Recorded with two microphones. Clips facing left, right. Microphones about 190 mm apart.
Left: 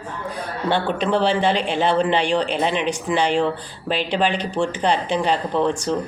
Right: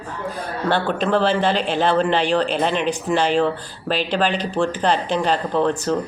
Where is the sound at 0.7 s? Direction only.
15° left (ahead or behind).